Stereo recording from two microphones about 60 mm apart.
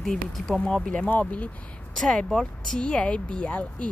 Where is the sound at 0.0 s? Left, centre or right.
Centre; by 1.2 s left.